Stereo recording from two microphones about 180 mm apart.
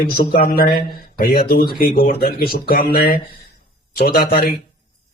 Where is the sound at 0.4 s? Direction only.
55° left (ahead or behind).